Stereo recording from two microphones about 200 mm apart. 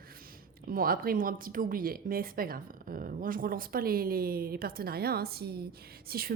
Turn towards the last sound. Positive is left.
turn(degrees=-50)  # may be behind; listen again after turning